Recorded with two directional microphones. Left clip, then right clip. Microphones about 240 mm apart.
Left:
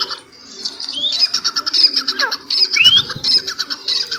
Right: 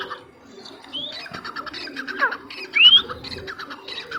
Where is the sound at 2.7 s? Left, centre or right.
Centre.